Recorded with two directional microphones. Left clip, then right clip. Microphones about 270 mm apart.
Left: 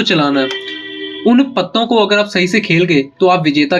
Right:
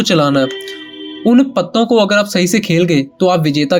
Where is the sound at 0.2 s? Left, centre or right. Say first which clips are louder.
Right 1 dB; right.